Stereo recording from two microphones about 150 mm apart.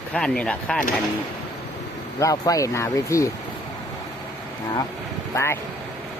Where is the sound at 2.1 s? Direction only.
20° left (ahead or behind).